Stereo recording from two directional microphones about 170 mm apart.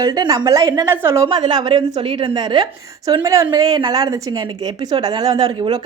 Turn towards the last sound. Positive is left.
turn(degrees=-25)  # may be behind; listen again after turning